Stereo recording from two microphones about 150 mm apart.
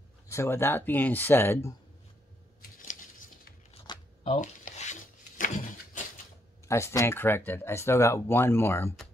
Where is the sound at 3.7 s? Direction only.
35° left (ahead or behind).